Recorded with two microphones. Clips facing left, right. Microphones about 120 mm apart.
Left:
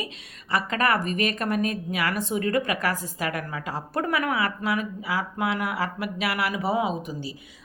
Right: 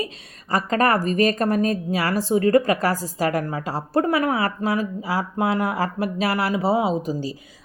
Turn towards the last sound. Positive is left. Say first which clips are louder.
# right 5 dB
turn(degrees=-30)  # may be behind; listen again after turning